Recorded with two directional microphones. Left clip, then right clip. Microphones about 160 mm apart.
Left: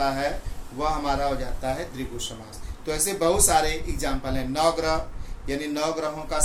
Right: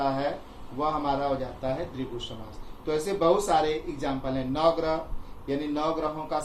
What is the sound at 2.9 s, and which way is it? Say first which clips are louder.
A man's voice: even; 30° left (ahead or behind).